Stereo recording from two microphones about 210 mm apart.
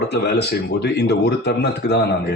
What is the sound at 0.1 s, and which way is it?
Speech, 50° left (ahead or behind).